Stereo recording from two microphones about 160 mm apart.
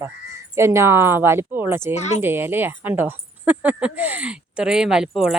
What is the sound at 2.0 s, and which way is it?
Speech, 45° left (ahead or behind).